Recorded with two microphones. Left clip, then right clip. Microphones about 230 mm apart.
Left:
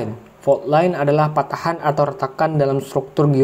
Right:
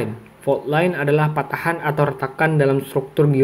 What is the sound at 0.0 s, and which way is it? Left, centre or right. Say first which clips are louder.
Speech: left 3 dB; centre.